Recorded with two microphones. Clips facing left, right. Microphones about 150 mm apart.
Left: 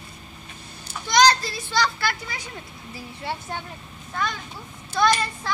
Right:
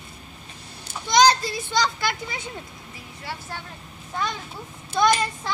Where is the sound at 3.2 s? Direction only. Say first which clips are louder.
Left 4 dB; 25° left (ahead or behind).